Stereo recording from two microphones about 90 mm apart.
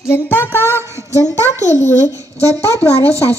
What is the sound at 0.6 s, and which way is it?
Speech, 30° right (ahead or behind).